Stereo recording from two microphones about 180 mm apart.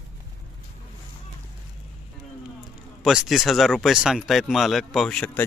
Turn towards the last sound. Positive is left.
turn(degrees=5)  # may be behind; listen again after turning